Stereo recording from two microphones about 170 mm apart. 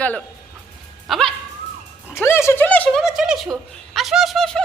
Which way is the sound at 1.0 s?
Centre (ahead or behind).